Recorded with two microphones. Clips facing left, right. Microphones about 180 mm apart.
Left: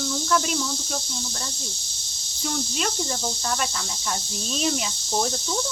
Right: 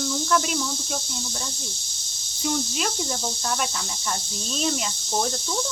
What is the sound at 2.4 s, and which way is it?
Speech, 5° right (ahead or behind).